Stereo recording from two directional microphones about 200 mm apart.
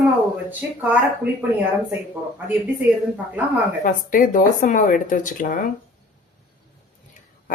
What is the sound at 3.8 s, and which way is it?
Speech, 45° left (ahead or behind).